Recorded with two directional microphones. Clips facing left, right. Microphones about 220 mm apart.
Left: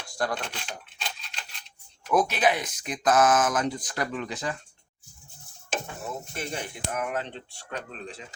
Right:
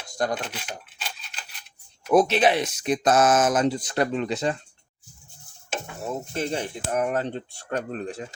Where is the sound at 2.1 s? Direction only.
30° right (ahead or behind).